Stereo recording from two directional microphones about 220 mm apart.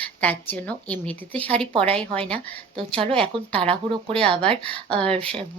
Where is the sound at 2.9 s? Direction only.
25° right (ahead or behind).